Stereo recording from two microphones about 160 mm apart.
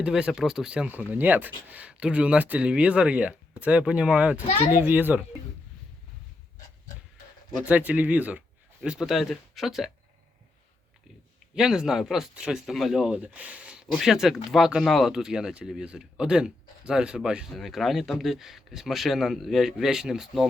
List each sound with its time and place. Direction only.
0.0 s speech: 5° right (ahead or behind)
7.6 s speech: 10° right (ahead or behind)
11.5 s speech: 5° right (ahead or behind)